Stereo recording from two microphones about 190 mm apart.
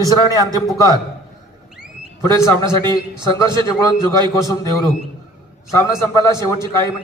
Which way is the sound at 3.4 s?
20° left (ahead or behind).